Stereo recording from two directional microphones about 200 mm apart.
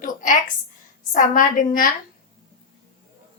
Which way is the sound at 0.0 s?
40° left (ahead or behind).